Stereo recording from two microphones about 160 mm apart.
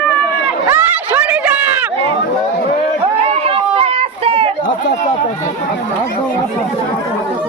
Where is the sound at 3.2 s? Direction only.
35° right (ahead or behind).